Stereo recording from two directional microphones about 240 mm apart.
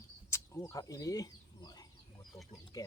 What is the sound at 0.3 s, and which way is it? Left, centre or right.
Bird, centre.